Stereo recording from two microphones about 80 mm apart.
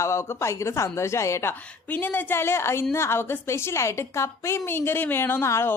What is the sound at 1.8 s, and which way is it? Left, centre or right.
A woman's voice, left.